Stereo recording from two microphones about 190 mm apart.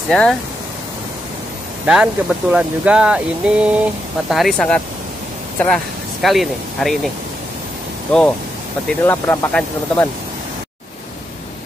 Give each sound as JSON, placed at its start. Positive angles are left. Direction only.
{"t": 0.1, "sound": "speech", "side_deg": 5}
{"t": 1.9, "sound": "speech", "side_deg": -5}
{"t": 8.8, "sound": "speech", "side_deg": 10}